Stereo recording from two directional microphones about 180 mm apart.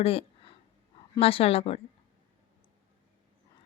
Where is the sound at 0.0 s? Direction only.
30° left (ahead or behind).